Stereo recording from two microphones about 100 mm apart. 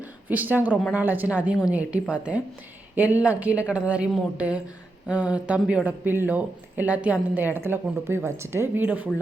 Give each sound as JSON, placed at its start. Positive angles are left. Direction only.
{"t": 0.3, "sound": "a woman's voice", "side_deg": -20}